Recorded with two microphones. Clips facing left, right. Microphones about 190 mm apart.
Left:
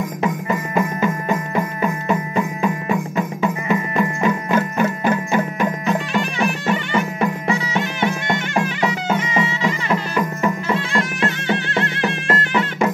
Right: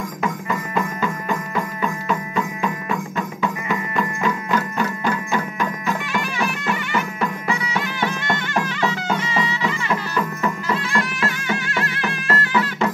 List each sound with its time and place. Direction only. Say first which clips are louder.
0.2 s music: left 2 dB; 20° left (ahead or behind)